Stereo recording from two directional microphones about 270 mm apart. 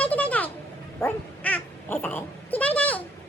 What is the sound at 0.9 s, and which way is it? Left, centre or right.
Dog, centre.